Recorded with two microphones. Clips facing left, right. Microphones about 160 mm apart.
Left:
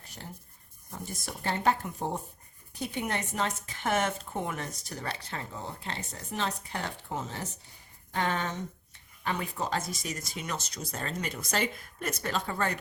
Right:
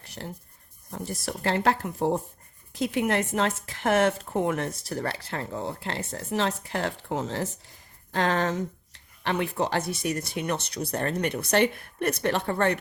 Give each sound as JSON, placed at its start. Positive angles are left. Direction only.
{"t": 0.0, "sound": "writing", "side_deg": -75}
{"t": 1.0, "sound": "speech", "side_deg": -90}
{"t": 4.5, "sound": "speech", "side_deg": -35}
{"t": 5.0, "sound": "speech", "side_deg": -70}
{"t": 6.1, "sound": "speech", "side_deg": -90}